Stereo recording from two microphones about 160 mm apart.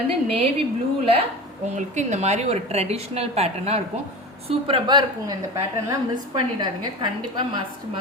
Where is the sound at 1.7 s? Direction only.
45° right (ahead or behind).